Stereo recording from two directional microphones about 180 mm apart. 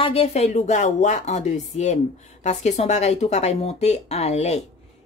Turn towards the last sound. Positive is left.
turn(degrees=35)  # may be behind; listen again after turning